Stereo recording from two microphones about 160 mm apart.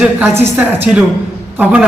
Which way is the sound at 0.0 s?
10° right (ahead or behind).